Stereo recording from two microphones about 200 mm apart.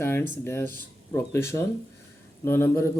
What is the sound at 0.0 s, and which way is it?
Speech, 10° left (ahead or behind).